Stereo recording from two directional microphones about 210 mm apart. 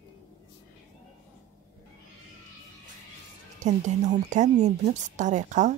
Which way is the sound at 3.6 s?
35° right (ahead or behind).